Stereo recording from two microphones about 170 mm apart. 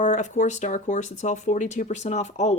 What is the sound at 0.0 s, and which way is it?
A woman's voice, 45° left (ahead or behind).